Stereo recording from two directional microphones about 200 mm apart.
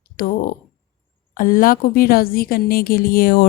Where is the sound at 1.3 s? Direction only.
45° left (ahead or behind).